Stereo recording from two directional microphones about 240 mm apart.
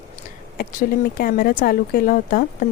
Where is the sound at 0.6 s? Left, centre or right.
Left.